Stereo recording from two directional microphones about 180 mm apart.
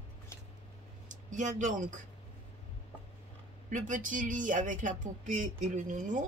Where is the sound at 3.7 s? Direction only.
45° right (ahead or behind).